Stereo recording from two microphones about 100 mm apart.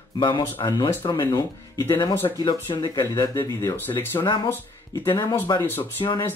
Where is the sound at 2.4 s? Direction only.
50° left (ahead or behind).